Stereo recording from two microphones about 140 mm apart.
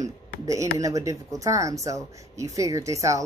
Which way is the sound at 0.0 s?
25° right (ahead or behind).